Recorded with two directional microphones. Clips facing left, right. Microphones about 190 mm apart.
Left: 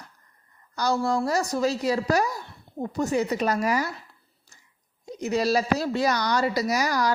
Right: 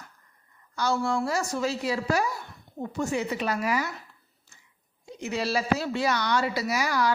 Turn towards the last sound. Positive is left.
turn(degrees=40)  # may be behind; listen again after turning